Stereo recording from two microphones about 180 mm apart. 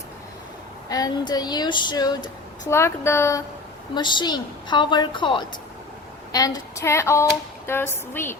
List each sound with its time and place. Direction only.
0.9 s speech: 20° left (ahead or behind)
6.3 s child singing: 20° left (ahead or behind)